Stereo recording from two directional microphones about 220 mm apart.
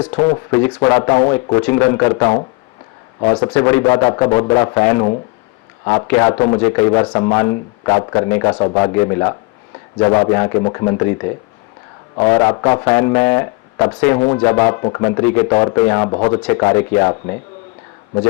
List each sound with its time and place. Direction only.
0.0 s speech: 15° left (ahead or behind)
12.1 s speech: 10° left (ahead or behind)
14.8 s a man's voice: 25° left (ahead or behind)
15.2 s speech: 10° left (ahead or behind)